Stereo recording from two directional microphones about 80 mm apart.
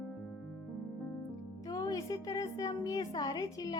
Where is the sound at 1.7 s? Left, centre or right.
Left.